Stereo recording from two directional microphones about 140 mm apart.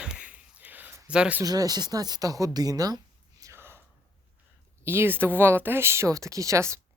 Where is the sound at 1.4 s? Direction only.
25° right (ahead or behind).